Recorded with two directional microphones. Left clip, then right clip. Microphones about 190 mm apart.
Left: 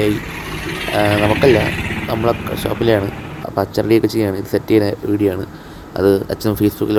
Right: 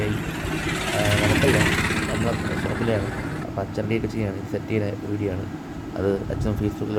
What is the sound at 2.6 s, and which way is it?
Speech, 40° left (ahead or behind).